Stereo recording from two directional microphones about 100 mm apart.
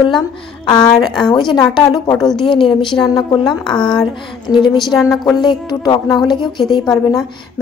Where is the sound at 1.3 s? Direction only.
50° left (ahead or behind).